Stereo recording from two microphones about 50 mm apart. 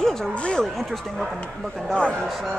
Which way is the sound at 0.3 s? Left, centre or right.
Left.